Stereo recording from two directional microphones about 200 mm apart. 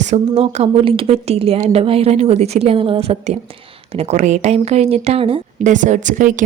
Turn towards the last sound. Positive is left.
turn(degrees=-40)  # may be behind; listen again after turning